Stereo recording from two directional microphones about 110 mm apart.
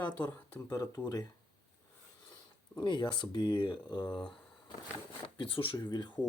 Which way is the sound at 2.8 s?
45° left (ahead or behind).